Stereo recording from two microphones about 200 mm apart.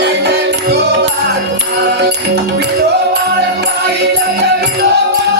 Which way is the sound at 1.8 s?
55° right (ahead or behind).